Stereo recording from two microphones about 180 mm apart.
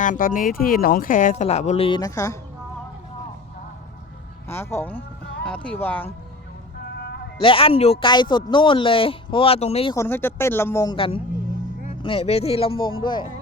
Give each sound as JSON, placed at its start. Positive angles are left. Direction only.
{"t": 0.0, "sound": "speech", "side_deg": 50}
{"t": 2.0, "sound": "speech", "side_deg": 20}
{"t": 4.4, "sound": "speech", "side_deg": 15}
{"t": 5.2, "sound": "music", "side_deg": 70}
{"t": 5.6, "sound": "speech", "side_deg": 10}
{"t": 6.9, "sound": "music", "side_deg": 70}
{"t": 7.4, "sound": "speech", "side_deg": 30}
{"t": 9.9, "sound": "speech", "side_deg": 15}
{"t": 10.9, "sound": "speech", "side_deg": 30}